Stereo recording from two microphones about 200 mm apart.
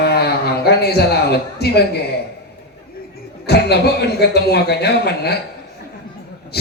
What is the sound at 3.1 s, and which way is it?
Speech, 55° left (ahead or behind).